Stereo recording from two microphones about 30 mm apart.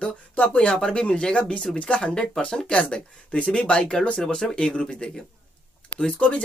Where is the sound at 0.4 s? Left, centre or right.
Left.